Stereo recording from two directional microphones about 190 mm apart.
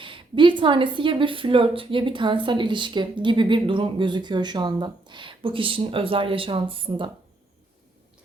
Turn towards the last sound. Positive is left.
turn(degrees=-25)  # may be behind; listen again after turning